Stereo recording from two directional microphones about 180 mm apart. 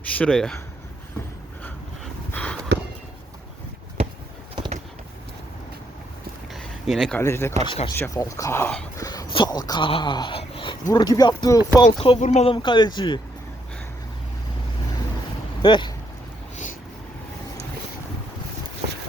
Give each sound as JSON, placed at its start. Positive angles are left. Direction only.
{"t": 0.1, "sound": "speech", "side_deg": 5}
{"t": 2.3, "sound": "a sound", "side_deg": 10}
{"t": 6.5, "sound": "a sound", "side_deg": 0}
{"t": 7.2, "sound": "speech", "side_deg": 15}
{"t": 7.6, "sound": "speech", "side_deg": 30}
{"t": 7.9, "sound": "speech", "side_deg": 15}
{"t": 9.0, "sound": "speech", "side_deg": 25}
{"t": 15.6, "sound": "speech", "side_deg": 25}